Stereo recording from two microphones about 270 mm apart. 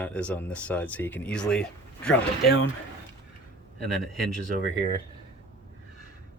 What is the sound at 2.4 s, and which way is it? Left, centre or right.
Speech, left.